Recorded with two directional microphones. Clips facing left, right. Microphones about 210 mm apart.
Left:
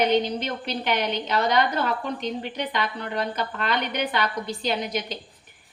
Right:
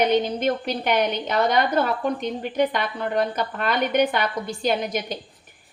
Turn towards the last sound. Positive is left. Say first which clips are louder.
# right 3 dB
turn(degrees=-50)  # may be behind; listen again after turning